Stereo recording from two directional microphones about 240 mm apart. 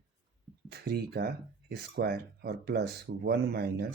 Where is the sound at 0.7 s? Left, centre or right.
Right.